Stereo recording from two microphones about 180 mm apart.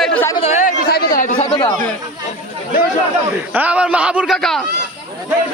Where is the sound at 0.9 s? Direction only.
55° left (ahead or behind).